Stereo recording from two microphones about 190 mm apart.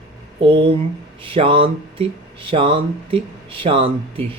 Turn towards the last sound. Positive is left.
turn(degrees=-30)  # may be behind; listen again after turning